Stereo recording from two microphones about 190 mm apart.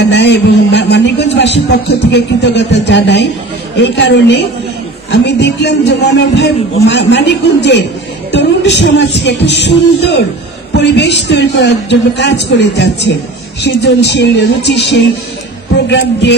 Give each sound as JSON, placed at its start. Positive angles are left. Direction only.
{"t": 0.0, "sound": "a sound", "side_deg": 60}
{"t": 2.1, "sound": "a man's voice", "side_deg": 65}
{"t": 15.9, "sound": "a man's voice", "side_deg": 65}